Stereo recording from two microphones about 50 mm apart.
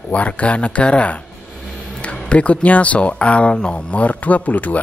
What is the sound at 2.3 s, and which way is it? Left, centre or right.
Speech, left.